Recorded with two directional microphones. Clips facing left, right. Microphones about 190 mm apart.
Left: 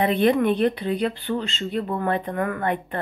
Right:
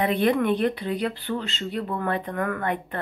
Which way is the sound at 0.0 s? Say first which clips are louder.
Left 3 dB; 25° left (ahead or behind).